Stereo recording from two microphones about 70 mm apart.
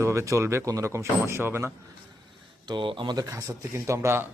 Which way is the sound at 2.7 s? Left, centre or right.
Right.